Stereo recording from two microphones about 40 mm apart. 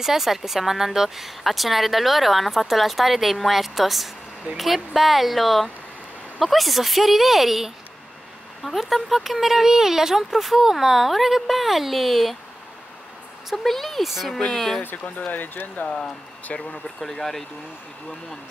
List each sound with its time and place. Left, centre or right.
0.0 s speech: centre
13.7 s speech: centre
14.0 s speech: centre
14.5 s speech: centre
15.0 s speech: left
16.8 s speech: centre